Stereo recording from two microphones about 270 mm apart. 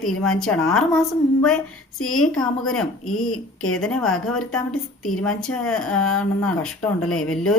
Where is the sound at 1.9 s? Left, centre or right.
Left.